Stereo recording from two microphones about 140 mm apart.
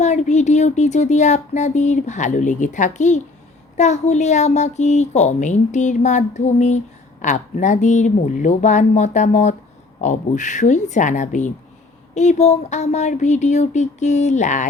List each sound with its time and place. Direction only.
0.0 s speech: 55° left (ahead or behind)